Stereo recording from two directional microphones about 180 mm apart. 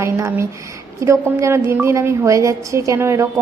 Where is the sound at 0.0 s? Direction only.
15° right (ahead or behind).